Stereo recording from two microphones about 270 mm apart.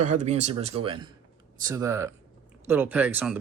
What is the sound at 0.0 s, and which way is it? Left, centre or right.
Speech, right.